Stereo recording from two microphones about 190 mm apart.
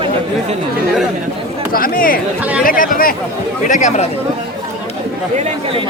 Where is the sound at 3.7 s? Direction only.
35° left (ahead or behind).